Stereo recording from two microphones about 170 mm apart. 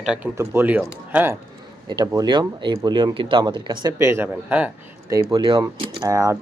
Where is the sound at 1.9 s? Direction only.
25° right (ahead or behind).